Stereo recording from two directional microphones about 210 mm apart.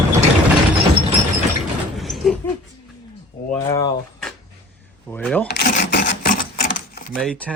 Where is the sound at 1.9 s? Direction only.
Centre (ahead or behind).